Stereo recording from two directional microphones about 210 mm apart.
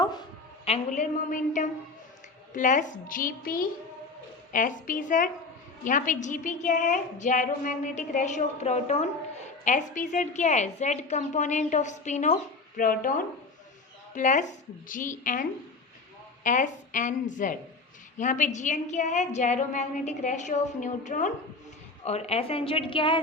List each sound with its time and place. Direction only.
0.0 s a woman's voice: 20° left (ahead or behind)